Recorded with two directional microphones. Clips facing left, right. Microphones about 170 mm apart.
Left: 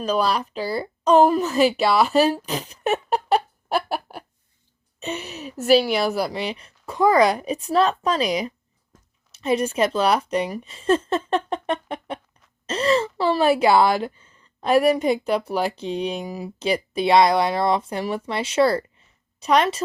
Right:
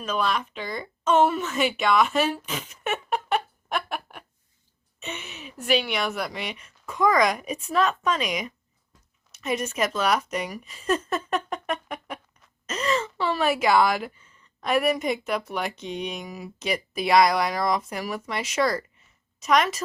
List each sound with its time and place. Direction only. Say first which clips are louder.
0.0 s a woman's voice: left 5 dB; 35° left (ahead or behind)
11.3 s a sound: left 5 dB; 30° left (ahead or behind)
12.6 s speech: left 6 dB; 30° left (ahead or behind)